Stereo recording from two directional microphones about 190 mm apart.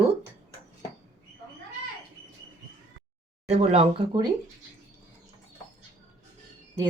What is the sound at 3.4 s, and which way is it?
Speech, 35° right (ahead or behind).